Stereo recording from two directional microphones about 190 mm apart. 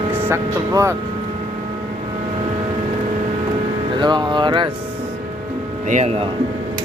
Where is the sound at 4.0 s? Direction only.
25° right (ahead or behind).